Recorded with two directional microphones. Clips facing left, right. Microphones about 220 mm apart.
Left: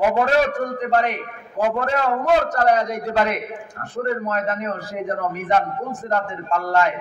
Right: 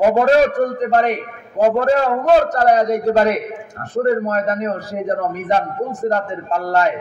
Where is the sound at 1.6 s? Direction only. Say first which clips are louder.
Right 6 dB; 35° right (ahead or behind).